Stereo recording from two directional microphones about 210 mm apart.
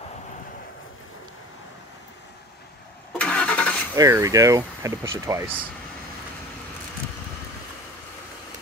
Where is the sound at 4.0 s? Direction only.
15° right (ahead or behind).